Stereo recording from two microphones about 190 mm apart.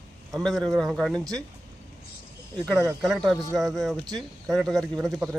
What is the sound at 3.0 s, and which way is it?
Speech, centre (ahead or behind).